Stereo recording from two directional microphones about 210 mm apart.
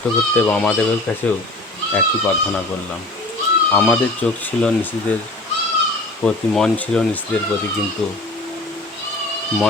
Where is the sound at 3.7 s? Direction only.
5° left (ahead or behind).